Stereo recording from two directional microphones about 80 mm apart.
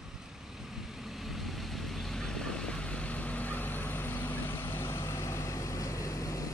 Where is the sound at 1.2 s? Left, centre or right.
Centre.